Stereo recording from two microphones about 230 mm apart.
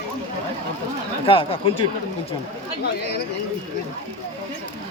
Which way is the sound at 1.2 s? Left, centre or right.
Left.